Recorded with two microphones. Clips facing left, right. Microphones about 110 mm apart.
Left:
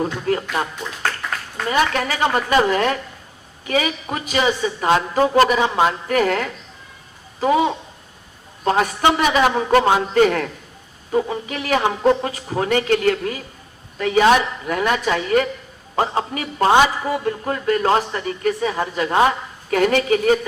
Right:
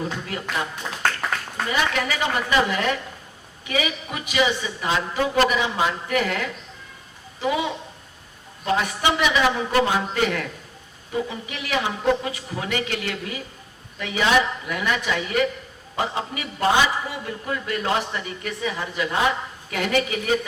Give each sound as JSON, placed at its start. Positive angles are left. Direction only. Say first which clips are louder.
{"t": 0.0, "sound": "a man's voice", "louder": "left 8 dB", "side_deg": 45}
{"t": 1.7, "sound": "a man's voice", "louder": "left 5 dB", "side_deg": 45}